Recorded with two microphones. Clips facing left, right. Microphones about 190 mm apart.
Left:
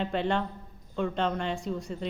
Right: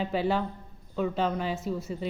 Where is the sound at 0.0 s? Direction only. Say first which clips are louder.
Right 1 dB; 5° right (ahead or behind).